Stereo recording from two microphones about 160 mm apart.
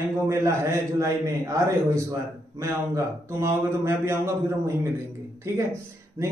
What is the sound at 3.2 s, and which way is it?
A man's voice, 15° right (ahead or behind).